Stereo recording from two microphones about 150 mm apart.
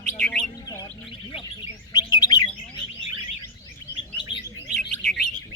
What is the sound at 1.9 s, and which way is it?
Chirp, 25° left (ahead or behind).